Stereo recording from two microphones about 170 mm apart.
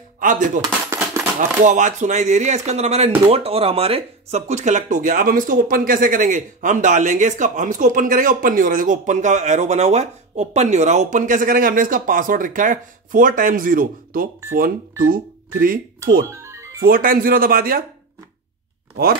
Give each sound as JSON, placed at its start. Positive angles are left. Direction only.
{"t": 0.2, "sound": "speech", "side_deg": -50}
{"t": 0.6, "sound": "a sound", "side_deg": -20}
{"t": 1.6, "sound": "speech", "side_deg": -45}
{"t": 16.3, "sound": "music", "side_deg": -15}
{"t": 16.8, "sound": "speech", "side_deg": -55}